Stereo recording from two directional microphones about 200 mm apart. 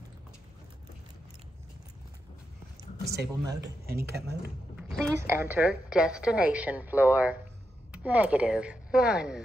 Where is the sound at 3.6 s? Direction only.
50° right (ahead or behind).